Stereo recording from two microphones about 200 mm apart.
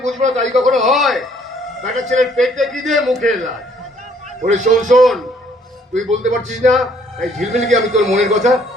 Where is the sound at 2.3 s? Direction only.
Centre (ahead or behind).